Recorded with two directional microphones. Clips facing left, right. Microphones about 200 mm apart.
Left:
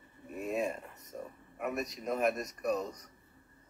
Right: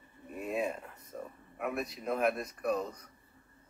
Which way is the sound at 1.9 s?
40° left (ahead or behind).